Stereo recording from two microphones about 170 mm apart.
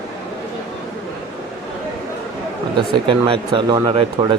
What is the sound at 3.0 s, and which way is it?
Speech, 30° right (ahead or behind).